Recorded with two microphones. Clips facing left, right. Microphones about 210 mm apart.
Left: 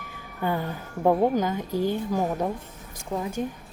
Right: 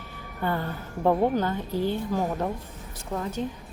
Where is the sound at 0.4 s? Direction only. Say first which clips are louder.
Left 1 dB; 15° left (ahead or behind).